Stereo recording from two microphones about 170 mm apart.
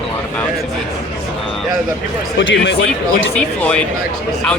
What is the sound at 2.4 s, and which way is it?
Speech, 90° left.